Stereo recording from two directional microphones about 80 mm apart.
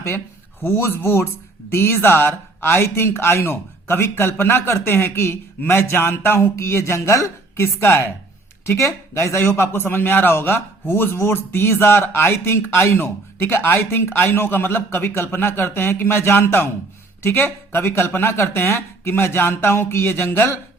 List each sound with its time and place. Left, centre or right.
0.6 s a man's voice: left